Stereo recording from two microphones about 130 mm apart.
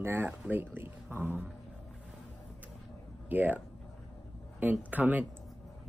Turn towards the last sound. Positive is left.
turn(degrees=-10)  # may be behind; listen again after turning